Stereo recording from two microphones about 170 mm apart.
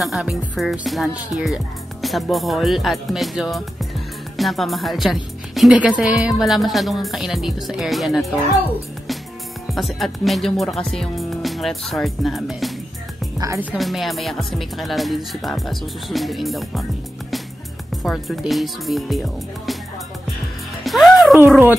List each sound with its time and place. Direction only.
0.0 s speech: centre (ahead or behind)
9.7 s speech: centre (ahead or behind)
13.4 s a woman's voice: 15° right (ahead or behind)
13.7 s speech: centre (ahead or behind)
18.0 s speech: centre (ahead or behind)
20.8 s music: centre (ahead or behind)